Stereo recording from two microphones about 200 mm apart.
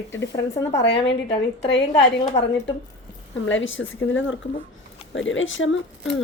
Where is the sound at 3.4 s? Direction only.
70° left (ahead or behind).